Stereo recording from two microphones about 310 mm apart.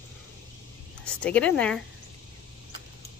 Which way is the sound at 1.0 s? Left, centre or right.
Centre.